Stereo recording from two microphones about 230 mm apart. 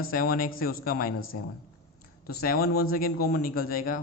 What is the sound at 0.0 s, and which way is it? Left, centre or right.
A man's voice, left.